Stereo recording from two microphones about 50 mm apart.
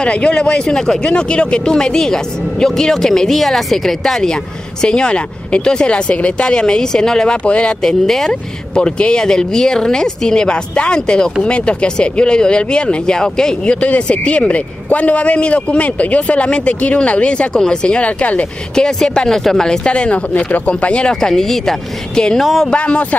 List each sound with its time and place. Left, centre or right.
0.0 s a man's voice: centre
7.8 s a man's voice: centre
13.7 s a man's voice: left
18.8 s speech: centre
19.9 s a man's voice: left
21.2 s speech: centre
22.4 s speech: centre
22.7 s a man's voice: left